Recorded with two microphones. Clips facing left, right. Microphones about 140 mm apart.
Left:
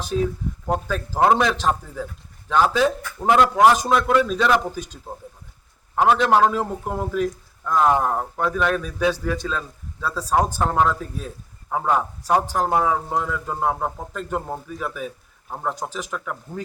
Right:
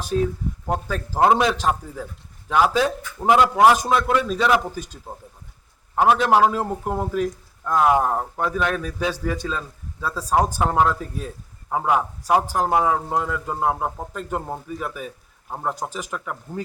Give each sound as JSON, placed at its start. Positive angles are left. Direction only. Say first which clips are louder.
{"t": 0.7, "sound": "a man's voice", "louder": "left 2 dB", "side_deg": -5}
{"t": 6.0, "sound": "a man's voice", "louder": "even", "side_deg": -5}